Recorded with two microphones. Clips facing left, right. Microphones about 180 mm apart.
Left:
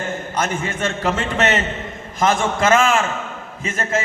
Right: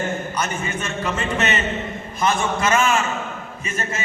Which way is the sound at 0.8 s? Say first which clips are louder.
Left 5 dB; 90° left.